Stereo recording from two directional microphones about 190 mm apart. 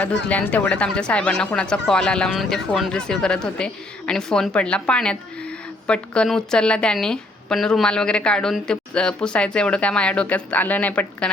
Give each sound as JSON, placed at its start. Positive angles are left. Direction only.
{"t": 0.3, "sound": "a woman's voice", "side_deg": 5}